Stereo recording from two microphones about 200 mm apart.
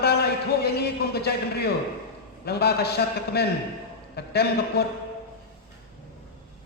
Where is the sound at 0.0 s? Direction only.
55° left (ahead or behind).